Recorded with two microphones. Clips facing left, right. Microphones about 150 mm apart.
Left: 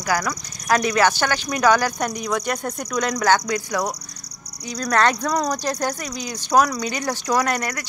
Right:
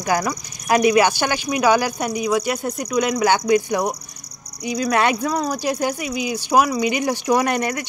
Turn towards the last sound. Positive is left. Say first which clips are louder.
# right 3 dB
turn(degrees=-20)  # may be behind; listen again after turning